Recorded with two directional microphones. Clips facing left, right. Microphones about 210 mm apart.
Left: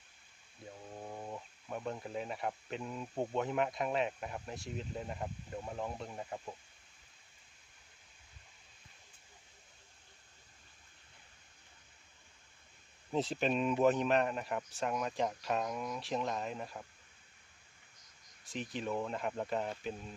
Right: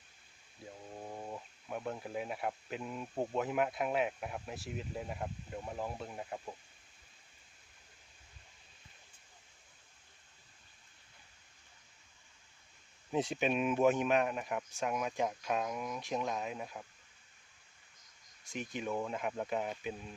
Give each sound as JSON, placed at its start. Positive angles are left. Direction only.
{"t": 0.6, "sound": "speech", "side_deg": -5}
{"t": 13.1, "sound": "speech", "side_deg": -5}
{"t": 18.4, "sound": "speech", "side_deg": 0}